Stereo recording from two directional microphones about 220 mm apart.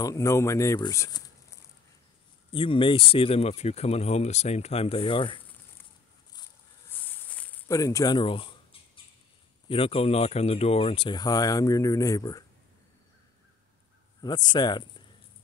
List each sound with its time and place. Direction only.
0.0 s speech: 15° left (ahead or behind)
7.1 s a sound: 5° left (ahead or behind); by 9.0 s 25° left (ahead or behind)
9.7 s speech: 25° left (ahead or behind)
14.2 s speech: 20° left (ahead or behind)